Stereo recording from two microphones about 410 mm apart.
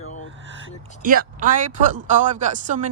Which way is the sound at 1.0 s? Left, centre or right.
Centre.